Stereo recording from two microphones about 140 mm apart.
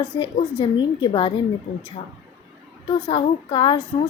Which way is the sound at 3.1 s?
40° left (ahead or behind).